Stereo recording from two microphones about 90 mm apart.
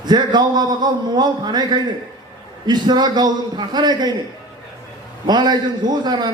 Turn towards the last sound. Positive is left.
turn(degrees=-50)  # may be behind; listen again after turning